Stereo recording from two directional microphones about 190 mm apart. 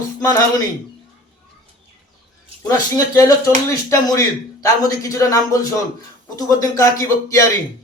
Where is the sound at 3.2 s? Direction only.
15° left (ahead or behind).